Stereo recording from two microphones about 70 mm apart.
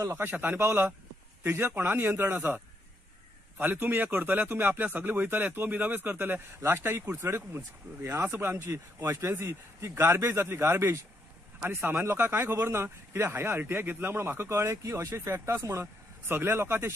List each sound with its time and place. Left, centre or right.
0.1 s speech: right